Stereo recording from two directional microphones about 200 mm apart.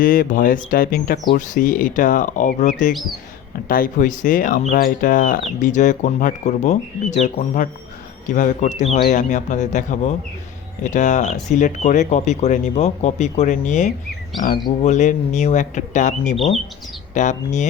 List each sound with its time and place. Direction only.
0.0 s speech: 45° left (ahead or behind)